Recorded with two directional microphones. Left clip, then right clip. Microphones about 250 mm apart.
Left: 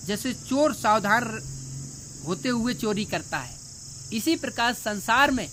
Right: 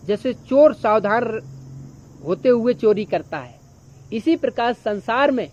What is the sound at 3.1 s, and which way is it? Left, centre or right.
Speech, left.